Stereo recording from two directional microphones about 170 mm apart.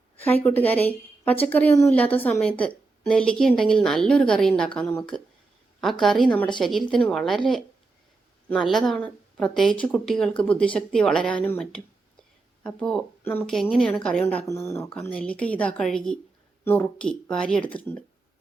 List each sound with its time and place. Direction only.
0.2 s a woman's voice: 10° left (ahead or behind)
14.4 s a woman's voice: 15° left (ahead or behind)